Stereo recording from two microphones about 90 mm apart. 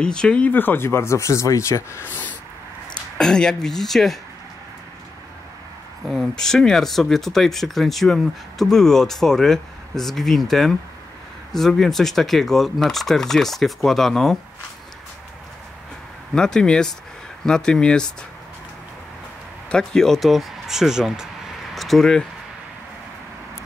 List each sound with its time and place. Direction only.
0.0 s speech: 10° left (ahead or behind)
0.5 s speech: 20° left (ahead or behind)
3.2 s speech: 10° left (ahead or behind)
6.0 s speech: centre (ahead or behind)
16.3 s speech: 10° left (ahead or behind)
19.7 s speech: 5° left (ahead or behind)